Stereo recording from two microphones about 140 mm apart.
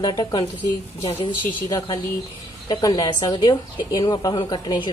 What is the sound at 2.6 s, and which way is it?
A woman's voice, 30° left (ahead or behind).